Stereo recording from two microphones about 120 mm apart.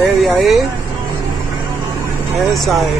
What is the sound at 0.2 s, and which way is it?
Speech, centre (ahead or behind).